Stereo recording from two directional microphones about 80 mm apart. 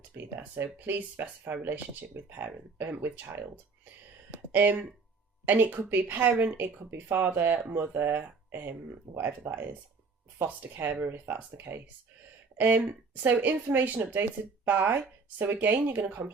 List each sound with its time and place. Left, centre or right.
0.3 s speech: right